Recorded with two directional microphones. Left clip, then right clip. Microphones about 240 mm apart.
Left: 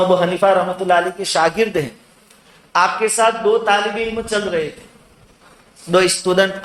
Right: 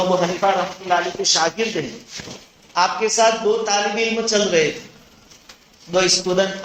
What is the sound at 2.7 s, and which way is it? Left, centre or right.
A man's voice, left.